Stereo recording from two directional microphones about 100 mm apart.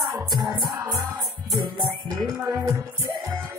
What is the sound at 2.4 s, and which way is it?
Music, 30° right (ahead or behind).